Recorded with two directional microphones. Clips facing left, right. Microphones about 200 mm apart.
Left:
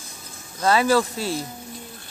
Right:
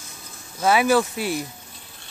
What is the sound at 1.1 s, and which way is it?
Speech, 30° left (ahead or behind).